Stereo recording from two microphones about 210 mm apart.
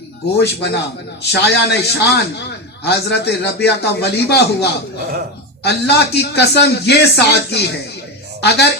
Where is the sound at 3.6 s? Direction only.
55° left (ahead or behind).